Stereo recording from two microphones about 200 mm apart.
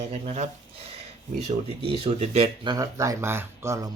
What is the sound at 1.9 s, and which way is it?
Speech, 30° right (ahead or behind).